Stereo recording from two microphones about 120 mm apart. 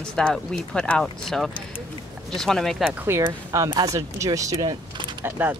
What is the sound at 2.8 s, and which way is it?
Speech, 15° right (ahead or behind).